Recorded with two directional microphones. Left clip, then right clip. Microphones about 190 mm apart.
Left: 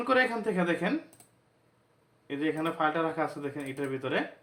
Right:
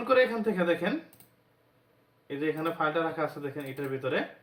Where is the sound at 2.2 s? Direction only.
50° left (ahead or behind).